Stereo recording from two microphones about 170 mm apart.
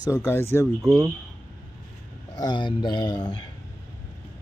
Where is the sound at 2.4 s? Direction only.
25° left (ahead or behind).